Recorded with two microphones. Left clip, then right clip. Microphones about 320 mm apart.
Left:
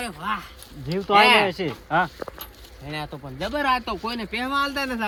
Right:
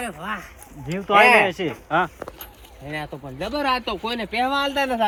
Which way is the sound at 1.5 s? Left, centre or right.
Left.